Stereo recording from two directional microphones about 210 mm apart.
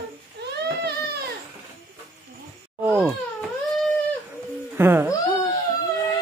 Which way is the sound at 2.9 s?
5° right (ahead or behind).